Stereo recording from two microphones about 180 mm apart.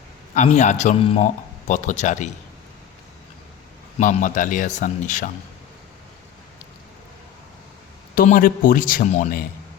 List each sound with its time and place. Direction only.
0.3 s speech: 40° left (ahead or behind)
3.9 s speech: 40° left (ahead or behind)
8.1 s speech: 50° left (ahead or behind)